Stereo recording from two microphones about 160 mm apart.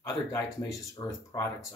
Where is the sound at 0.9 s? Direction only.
20° left (ahead or behind).